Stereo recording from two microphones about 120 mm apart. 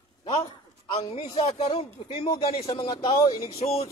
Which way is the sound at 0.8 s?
55° left (ahead or behind).